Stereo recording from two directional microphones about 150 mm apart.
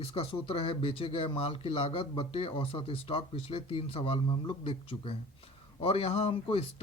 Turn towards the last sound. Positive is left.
turn(degrees=40)  # may be behind; listen again after turning